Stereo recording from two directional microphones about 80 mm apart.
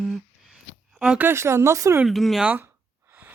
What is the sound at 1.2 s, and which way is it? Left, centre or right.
Speech, right.